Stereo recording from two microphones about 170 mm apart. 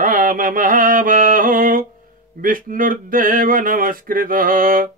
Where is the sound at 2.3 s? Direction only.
55° right (ahead or behind).